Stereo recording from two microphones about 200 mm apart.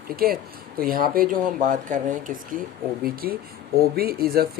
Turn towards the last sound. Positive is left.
turn(degrees=-50)  # may be behind; listen again after turning